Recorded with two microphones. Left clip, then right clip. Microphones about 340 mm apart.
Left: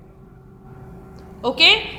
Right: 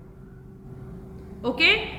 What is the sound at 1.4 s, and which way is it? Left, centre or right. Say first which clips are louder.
Speech: left 6 dB; centre.